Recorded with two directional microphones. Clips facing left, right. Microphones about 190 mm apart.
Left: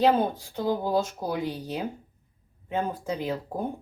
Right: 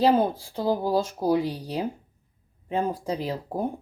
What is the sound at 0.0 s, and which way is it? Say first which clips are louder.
Speech: right 2 dB; 30° right (ahead or behind).